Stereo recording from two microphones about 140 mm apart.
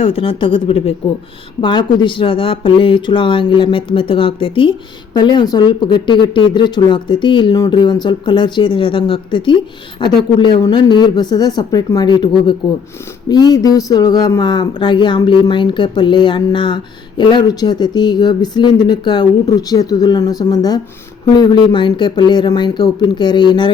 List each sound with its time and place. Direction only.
0.0 s speech: 40° left (ahead or behind)